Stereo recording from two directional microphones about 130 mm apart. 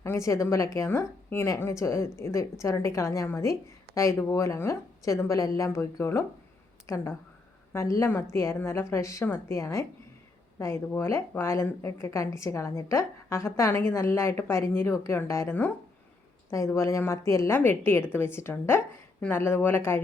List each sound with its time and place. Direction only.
0.0 s a woman's voice: 20° left (ahead or behind)